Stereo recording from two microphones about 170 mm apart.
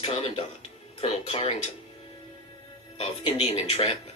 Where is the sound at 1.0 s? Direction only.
35° left (ahead or behind).